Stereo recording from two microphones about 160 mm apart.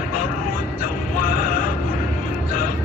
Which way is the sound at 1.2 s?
60° left (ahead or behind).